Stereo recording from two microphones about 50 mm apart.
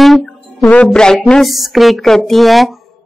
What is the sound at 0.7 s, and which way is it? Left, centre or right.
Speech, left.